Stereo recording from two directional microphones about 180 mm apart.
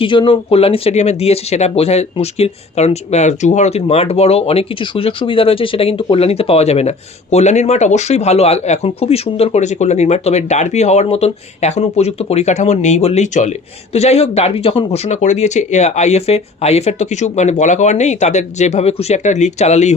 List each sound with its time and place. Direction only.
0.0 s speech: 30° left (ahead or behind)